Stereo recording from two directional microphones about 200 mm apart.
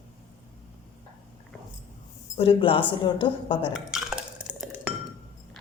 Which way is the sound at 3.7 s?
5° right (ahead or behind).